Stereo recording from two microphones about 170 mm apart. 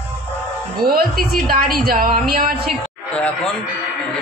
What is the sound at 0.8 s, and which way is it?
Speech, 60° right (ahead or behind).